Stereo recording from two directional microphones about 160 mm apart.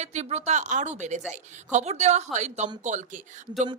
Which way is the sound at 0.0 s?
45° right (ahead or behind).